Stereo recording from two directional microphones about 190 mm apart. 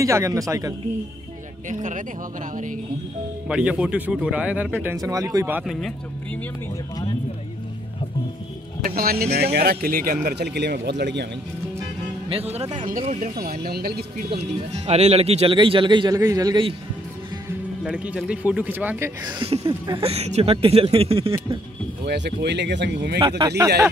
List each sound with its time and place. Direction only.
0.0 s speech: 15° right (ahead or behind)
1.7 s speech: 40° right (ahead or behind)
3.4 s speech: 5° right (ahead or behind)
8.8 s speech: 50° right (ahead or behind)
12.3 s speech: 30° right (ahead or behind)
13.4 s speech: 55° right (ahead or behind)
14.3 s speech: 35° right (ahead or behind)
17.5 s speech: 5° right (ahead or behind)
20.0 s speech: 35° right (ahead or behind)
22.0 s speech: 60° right (ahead or behind)
23.1 s speech: 20° right (ahead or behind)